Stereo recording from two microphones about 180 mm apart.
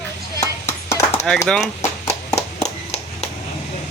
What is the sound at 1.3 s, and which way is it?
Speech, 5° left (ahead or behind).